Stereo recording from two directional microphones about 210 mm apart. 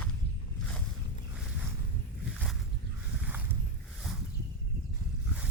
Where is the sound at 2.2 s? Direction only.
Centre (ahead or behind).